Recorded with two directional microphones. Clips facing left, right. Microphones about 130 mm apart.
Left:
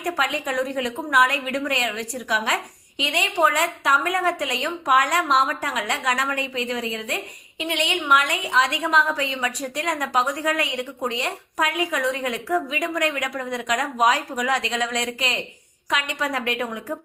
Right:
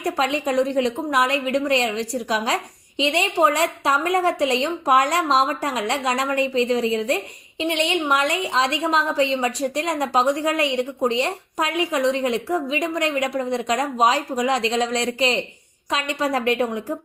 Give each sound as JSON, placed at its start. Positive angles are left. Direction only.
{"t": 0.0, "sound": "a woman's voice", "side_deg": -30}